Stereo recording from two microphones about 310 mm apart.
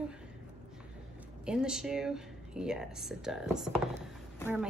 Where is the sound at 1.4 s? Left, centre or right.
Centre.